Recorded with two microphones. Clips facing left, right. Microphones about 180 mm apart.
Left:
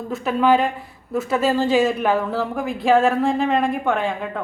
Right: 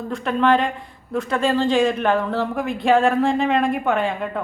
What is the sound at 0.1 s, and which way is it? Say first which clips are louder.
A woman's voice: left 1 dB; 5° left (ahead or behind).